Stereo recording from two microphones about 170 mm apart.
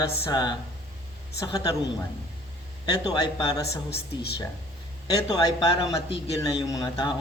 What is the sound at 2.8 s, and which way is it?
Speech, 25° left (ahead or behind).